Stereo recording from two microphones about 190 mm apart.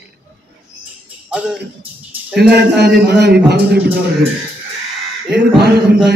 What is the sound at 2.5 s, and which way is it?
Speech, 60° right (ahead or behind).